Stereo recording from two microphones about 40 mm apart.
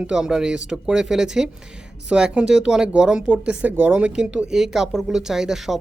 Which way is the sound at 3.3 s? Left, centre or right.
Right.